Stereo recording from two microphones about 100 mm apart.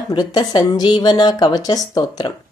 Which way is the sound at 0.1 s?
45° left (ahead or behind).